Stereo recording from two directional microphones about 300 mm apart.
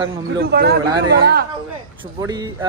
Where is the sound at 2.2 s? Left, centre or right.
Centre.